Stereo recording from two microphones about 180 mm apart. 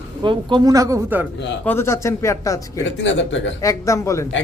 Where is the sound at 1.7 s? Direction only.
15° left (ahead or behind).